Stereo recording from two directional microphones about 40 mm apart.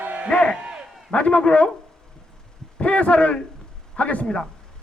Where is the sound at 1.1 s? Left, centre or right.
Left.